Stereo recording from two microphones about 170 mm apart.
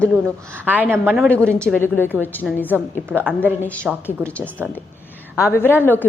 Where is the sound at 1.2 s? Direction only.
5° left (ahead or behind).